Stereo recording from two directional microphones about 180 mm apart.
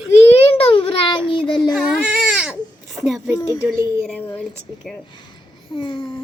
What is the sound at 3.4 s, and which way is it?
Speech, 15° left (ahead or behind).